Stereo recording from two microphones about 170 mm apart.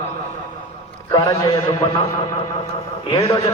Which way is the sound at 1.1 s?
25° left (ahead or behind).